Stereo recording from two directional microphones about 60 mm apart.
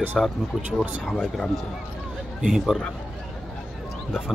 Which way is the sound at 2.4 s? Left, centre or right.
Centre.